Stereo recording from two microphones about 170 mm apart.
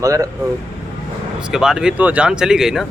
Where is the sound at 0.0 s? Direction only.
20° right (ahead or behind).